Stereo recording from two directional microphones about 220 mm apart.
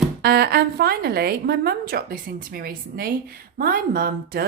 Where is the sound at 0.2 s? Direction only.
45° right (ahead or behind).